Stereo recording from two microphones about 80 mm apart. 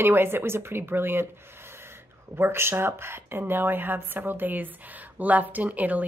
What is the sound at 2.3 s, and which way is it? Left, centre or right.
A woman's voice, right.